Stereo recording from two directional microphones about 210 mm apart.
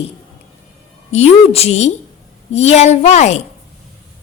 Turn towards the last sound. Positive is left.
turn(degrees=35)  # may be behind; listen again after turning